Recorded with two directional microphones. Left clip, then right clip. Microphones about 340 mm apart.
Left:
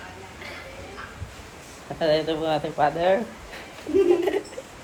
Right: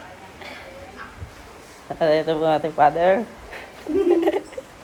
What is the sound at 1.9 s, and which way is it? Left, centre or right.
Speech, centre.